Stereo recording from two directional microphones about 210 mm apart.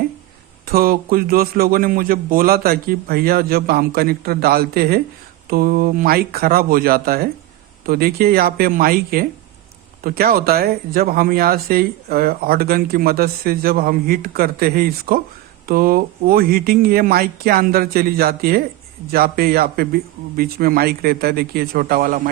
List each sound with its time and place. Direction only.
0.7 s speech: 45° right (ahead or behind)